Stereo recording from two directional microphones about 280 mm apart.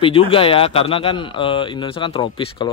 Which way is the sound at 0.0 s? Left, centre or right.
Centre.